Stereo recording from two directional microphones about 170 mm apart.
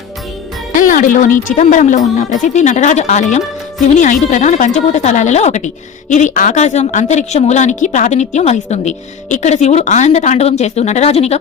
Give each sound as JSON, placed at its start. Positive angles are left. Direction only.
{"t": 0.8, "sound": "a woman's voice", "side_deg": 50}